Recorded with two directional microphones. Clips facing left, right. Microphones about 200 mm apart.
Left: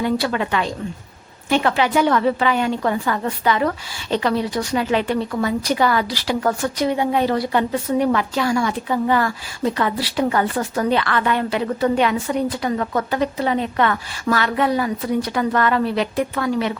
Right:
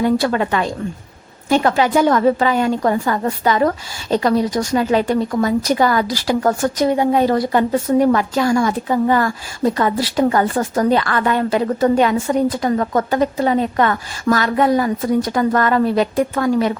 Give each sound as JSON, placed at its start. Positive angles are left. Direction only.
{"t": 0.0, "sound": "a woman's voice", "side_deg": -45}